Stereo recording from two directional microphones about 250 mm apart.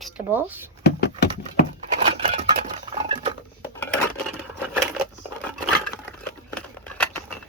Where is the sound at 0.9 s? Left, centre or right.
Left.